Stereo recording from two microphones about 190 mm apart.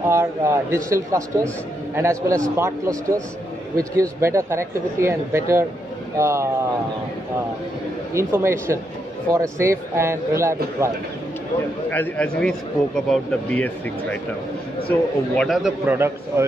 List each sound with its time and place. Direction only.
0.1 s speech: 15° right (ahead or behind)
8.1 s speech: 15° right (ahead or behind)
11.9 s a man's voice: 10° left (ahead or behind); by 16.4 s 10° right (ahead or behind)